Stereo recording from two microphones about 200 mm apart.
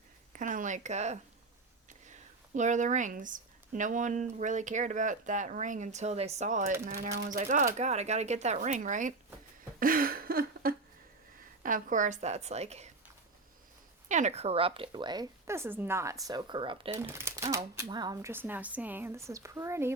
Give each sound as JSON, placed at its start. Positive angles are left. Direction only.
{"t": 0.3, "sound": "speech", "side_deg": -40}
{"t": 2.6, "sound": "speech", "side_deg": -40}
{"t": 9.8, "sound": "a sound", "side_deg": -45}
{"t": 11.6, "sound": "speech", "side_deg": -40}
{"t": 14.1, "sound": "a woman's voice", "side_deg": -35}
{"t": 16.9, "sound": "speech", "side_deg": -10}